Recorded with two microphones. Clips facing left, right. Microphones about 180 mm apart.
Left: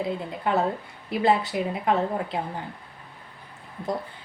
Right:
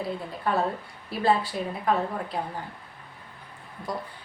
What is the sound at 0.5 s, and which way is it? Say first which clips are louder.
A woman's voice: left 2 dB; 20° left (ahead or behind).